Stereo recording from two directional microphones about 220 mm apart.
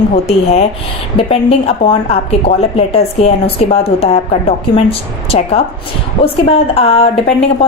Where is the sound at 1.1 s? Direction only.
25° left (ahead or behind).